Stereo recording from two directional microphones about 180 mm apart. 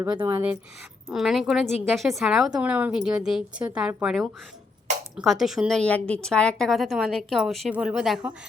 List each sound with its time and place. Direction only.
0.3 s speech: 15° right (ahead or behind)
1.1 s a woman's voice: centre (ahead or behind)